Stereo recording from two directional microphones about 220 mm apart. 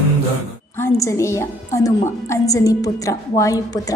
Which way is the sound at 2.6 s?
15° left (ahead or behind).